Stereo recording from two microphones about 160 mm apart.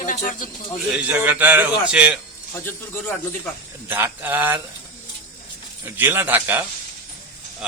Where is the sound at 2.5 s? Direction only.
15° left (ahead or behind).